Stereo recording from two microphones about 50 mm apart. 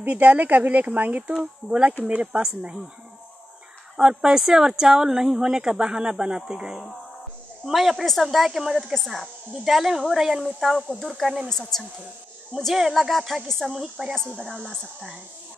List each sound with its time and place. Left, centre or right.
0.0 s speech: right
3.9 s a woman's voice: centre
10.9 s a woman's voice: centre
12.7 s a woman's voice: centre
14.1 s a woman's voice: centre